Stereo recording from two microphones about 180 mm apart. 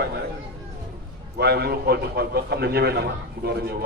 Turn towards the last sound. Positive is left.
turn(degrees=-60)  # may be behind; listen again after turning